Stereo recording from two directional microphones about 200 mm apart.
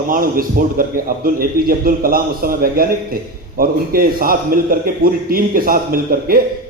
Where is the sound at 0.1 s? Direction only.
45° right (ahead or behind).